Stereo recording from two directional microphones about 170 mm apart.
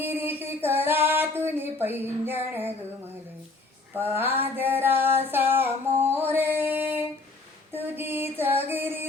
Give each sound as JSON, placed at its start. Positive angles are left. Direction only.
{"t": 0.0, "sound": "a sound", "side_deg": -10}
{"t": 2.0, "sound": "female singing", "side_deg": -10}
{"t": 3.9, "sound": "female singing", "side_deg": -10}
{"t": 4.5, "sound": "child singing", "side_deg": -10}
{"t": 6.3, "sound": "a sound", "side_deg": -10}
{"t": 8.7, "sound": "music", "side_deg": -10}